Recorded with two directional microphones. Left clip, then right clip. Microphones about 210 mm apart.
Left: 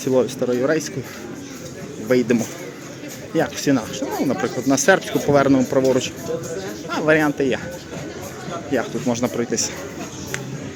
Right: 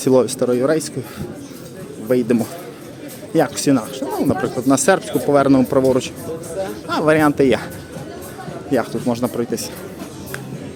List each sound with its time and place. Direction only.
0.0 s speech: 25° right (ahead or behind)
2.0 s speech: 10° right (ahead or behind)
8.7 s speech: 15° right (ahead or behind)